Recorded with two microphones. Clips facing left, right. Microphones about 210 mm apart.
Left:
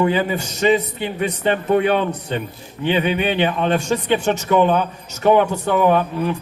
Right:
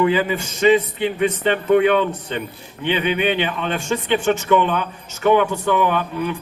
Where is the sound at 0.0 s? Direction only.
40° left (ahead or behind).